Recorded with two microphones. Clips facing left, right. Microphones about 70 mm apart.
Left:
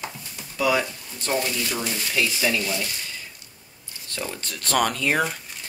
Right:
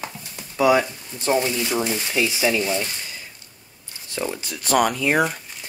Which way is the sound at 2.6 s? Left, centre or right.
Right.